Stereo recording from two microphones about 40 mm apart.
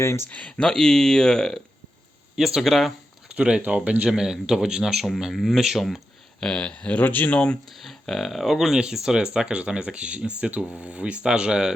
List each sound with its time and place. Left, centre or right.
0.3 s speech: left
0.6 s speech: centre
2.3 s speech: centre
2.6 s speech: centre
3.2 s a sound: right
3.7 s speech: right
4.1 s speech: centre
6.4 s speech: centre
6.9 s speech: left
7.3 s speech: left
7.7 s speech: centre
9.5 s speech: right
10.7 s speech: right
11.0 s speech: right